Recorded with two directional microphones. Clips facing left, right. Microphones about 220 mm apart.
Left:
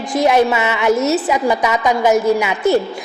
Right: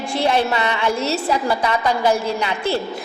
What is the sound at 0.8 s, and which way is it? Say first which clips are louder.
A woman's voice: left 8 dB; 15° left (ahead or behind).